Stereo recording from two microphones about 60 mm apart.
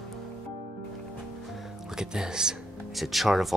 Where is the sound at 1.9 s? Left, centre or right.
Centre.